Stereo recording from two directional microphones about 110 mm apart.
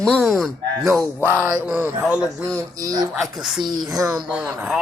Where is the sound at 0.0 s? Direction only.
5° left (ahead or behind).